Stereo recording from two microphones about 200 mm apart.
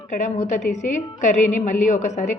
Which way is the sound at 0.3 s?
35° left (ahead or behind).